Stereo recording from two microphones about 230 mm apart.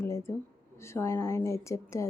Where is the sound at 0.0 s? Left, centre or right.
Centre.